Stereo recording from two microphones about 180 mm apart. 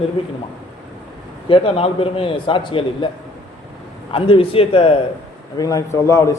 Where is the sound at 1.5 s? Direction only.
30° left (ahead or behind).